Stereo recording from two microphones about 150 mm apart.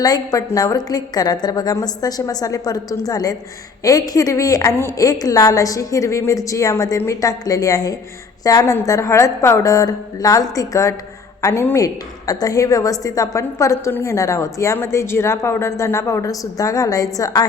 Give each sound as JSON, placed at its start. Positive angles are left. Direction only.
{"t": 0.0, "sound": "a woman's voice", "side_deg": 25}